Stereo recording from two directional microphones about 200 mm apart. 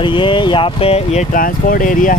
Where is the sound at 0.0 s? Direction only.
25° left (ahead or behind).